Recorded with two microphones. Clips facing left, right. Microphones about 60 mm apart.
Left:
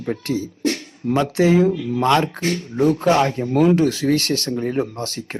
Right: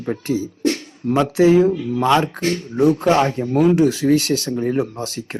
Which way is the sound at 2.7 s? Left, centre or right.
Centre.